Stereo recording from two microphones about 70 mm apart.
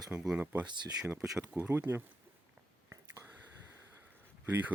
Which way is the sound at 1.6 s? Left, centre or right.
Right.